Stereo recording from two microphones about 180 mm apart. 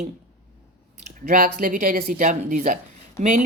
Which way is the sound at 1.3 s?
50° right (ahead or behind).